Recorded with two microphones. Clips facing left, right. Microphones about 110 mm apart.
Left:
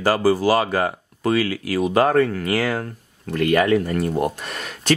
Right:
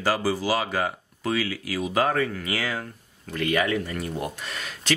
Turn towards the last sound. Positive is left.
turn(degrees=50)  # may be behind; listen again after turning